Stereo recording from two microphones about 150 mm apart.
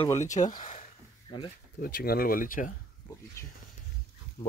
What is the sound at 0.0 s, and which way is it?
Speech, 20° left (ahead or behind).